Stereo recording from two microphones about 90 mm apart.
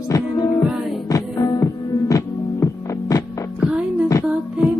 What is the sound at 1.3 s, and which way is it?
Music, 45° left (ahead or behind).